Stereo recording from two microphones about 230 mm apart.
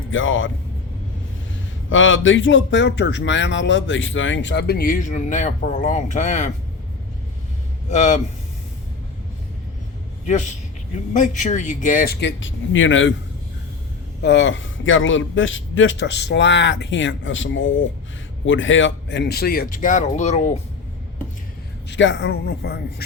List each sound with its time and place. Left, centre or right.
0.1 s a man's voice: left
1.9 s speech: left
7.9 s speech: left
10.9 s speech: left
14.2 s a man's voice: left
21.8 s speech: left